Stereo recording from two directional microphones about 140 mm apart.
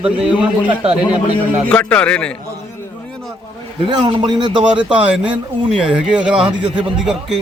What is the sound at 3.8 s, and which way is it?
Speech, 30° right (ahead or behind).